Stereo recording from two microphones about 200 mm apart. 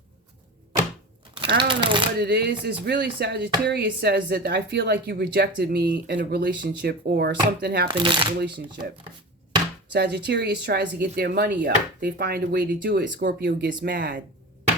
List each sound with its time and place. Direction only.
1.4 s speech: 25° right (ahead or behind)
2.1 s speech: 55° right (ahead or behind)
7.9 s speech: 25° right (ahead or behind)
8.4 s speech: 55° right (ahead or behind)
9.9 s speech: 60° right (ahead or behind)